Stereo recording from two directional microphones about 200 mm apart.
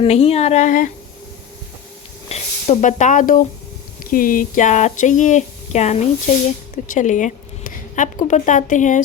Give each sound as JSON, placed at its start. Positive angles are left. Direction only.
{"t": 0.0, "sound": "speech", "side_deg": 30}
{"t": 2.3, "sound": "speech", "side_deg": 35}